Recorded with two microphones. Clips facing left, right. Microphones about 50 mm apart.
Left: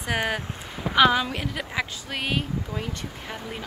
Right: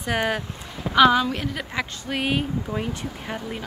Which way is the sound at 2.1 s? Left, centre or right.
Centre.